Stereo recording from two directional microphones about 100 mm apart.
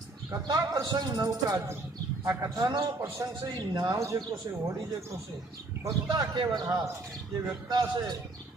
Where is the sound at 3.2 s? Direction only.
30° right (ahead or behind).